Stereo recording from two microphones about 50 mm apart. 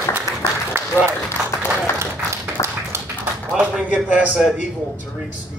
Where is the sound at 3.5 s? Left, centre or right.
Right.